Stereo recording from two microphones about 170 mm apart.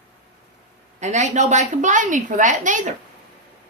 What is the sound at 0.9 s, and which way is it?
A woman's voice, 45° right (ahead or behind).